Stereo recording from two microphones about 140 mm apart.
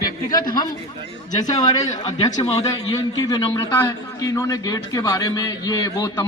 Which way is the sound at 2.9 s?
30° left (ahead or behind).